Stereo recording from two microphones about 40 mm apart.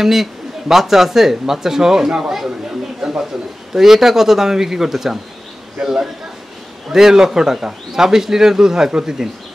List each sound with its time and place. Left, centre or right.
0.0 s a man's voice: centre
3.0 s a sound: right
3.7 s a man's voice: centre